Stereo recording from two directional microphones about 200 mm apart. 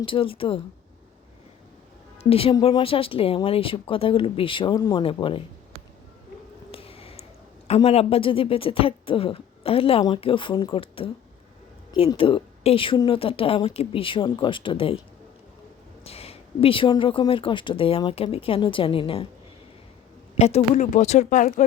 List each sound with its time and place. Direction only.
0.0 s speech: 25° left (ahead or behind)
2.3 s speech: 25° left (ahead or behind)
6.7 s a sound: 30° left (ahead or behind)
7.8 s speech: 30° left (ahead or behind)
16.0 s speech: 30° left (ahead or behind)
20.4 s speech: 35° left (ahead or behind)